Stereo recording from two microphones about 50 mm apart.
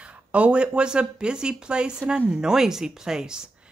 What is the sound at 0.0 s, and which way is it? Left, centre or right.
Speech, right.